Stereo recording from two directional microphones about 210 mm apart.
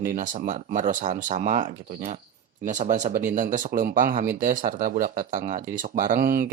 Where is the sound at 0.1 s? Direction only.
40° right (ahead or behind).